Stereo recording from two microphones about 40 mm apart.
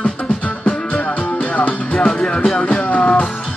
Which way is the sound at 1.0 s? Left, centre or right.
Left.